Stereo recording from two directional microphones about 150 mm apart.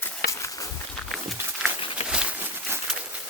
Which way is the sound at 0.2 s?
85° left.